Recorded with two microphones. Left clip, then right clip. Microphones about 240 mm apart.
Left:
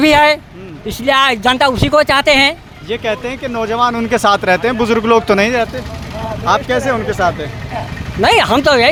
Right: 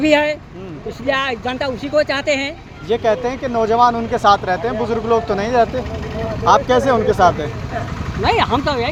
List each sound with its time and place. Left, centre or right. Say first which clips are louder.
0.0 s speech: left 6 dB; left
2.9 s speech: right 2 dB; centre
4.4 s speech: left 6 dB; left
6.4 s speech: right 1 dB; centre
8.2 s speech: left 6 dB; left